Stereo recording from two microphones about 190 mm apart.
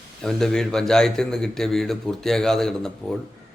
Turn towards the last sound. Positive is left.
turn(degrees=5)  # may be behind; listen again after turning